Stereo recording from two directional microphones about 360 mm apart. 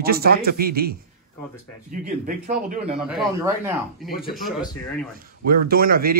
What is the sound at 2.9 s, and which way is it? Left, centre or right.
Speech, centre.